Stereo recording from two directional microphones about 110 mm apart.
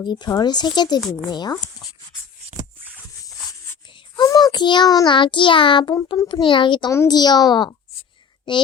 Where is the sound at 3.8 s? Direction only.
45° left (ahead or behind).